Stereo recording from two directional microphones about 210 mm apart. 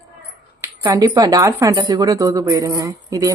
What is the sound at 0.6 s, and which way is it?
Speech, 15° right (ahead or behind).